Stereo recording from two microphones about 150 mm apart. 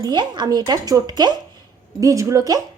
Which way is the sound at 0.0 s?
30° right (ahead or behind).